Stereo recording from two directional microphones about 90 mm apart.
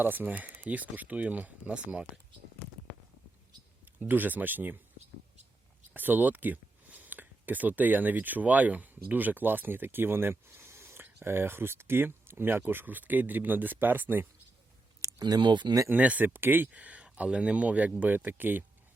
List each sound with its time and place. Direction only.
0.0 s speech: 20° right (ahead or behind)
4.1 s speech: 20° right (ahead or behind)
5.9 s speech: 20° right (ahead or behind)
15.2 s speech: 55° right (ahead or behind)
15.9 s speech: 15° right (ahead or behind)